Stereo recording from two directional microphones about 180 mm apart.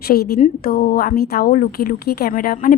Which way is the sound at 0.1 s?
60° left (ahead or behind).